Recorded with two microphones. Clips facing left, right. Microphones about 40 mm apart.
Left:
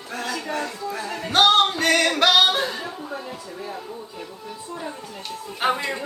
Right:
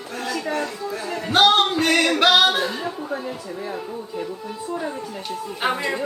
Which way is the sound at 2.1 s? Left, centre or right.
Right.